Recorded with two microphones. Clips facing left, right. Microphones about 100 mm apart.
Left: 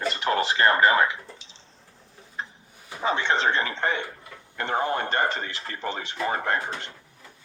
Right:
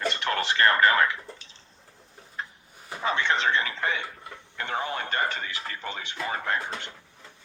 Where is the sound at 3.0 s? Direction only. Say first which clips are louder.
Left 2 dB; 30° left (ahead or behind).